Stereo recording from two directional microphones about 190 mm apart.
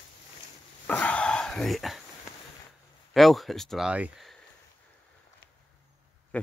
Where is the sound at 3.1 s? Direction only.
Centre (ahead or behind).